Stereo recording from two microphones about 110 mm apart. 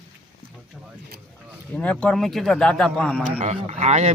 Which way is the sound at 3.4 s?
85° right.